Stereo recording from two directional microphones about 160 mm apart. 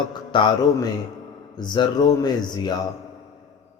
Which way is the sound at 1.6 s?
25° left (ahead or behind).